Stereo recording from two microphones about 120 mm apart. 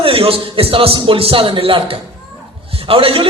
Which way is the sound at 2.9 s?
50° right (ahead or behind).